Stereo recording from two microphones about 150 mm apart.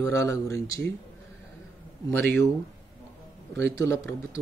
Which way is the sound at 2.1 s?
15° left (ahead or behind).